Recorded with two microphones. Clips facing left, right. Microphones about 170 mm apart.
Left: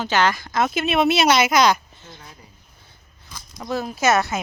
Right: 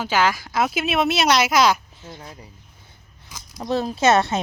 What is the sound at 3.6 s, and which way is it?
Speech, 30° right (ahead or behind).